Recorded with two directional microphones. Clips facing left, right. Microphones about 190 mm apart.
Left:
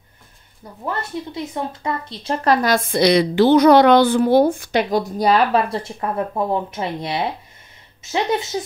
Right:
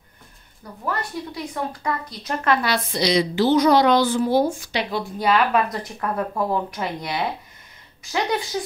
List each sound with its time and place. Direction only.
0.8 s speech: 25° left (ahead or behind)